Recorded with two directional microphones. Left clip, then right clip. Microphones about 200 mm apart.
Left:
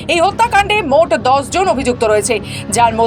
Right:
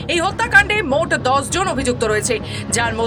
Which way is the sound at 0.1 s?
5° left (ahead or behind).